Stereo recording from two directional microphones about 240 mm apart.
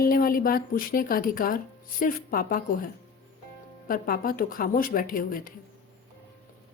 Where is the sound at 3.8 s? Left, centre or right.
Left.